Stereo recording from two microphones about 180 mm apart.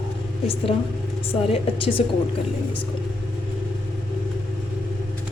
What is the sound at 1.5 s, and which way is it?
Speech, 30° left (ahead or behind).